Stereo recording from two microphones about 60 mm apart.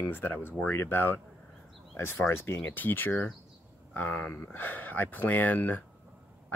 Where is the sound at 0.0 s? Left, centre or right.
Left.